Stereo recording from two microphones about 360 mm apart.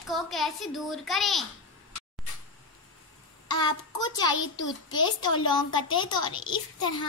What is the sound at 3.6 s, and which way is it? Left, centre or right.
A woman's voice, centre.